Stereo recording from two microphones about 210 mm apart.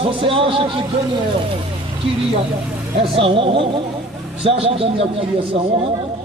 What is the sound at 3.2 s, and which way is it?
A man's voice, 25° right (ahead or behind).